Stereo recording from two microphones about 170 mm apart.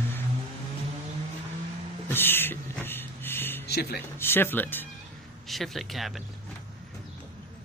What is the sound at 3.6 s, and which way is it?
Speech, 70° left (ahead or behind).